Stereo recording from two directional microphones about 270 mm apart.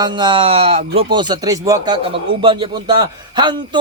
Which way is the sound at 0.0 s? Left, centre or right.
Centre.